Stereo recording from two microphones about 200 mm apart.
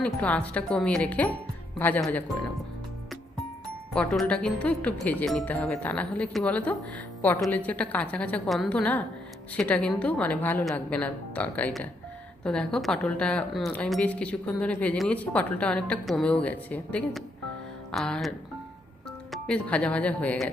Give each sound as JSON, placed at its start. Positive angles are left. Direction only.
{"t": 0.0, "sound": "speech", "side_deg": 5}
{"t": 3.9, "sound": "a woman's voice", "side_deg": 5}